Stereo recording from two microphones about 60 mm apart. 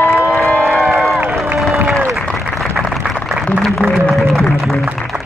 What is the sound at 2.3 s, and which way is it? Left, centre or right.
Applause, centre.